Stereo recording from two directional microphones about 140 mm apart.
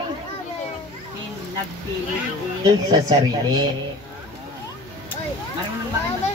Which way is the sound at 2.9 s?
30° right (ahead or behind).